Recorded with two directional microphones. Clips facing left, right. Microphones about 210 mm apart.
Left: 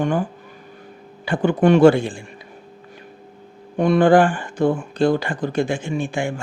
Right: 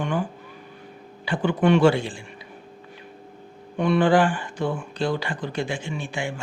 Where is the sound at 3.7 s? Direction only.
45° left (ahead or behind).